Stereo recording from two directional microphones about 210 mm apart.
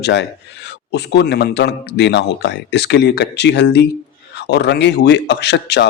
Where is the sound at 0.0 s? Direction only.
55° left (ahead or behind).